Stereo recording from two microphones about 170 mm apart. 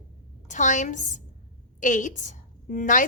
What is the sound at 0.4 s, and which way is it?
A woman's voice, 45° left (ahead or behind).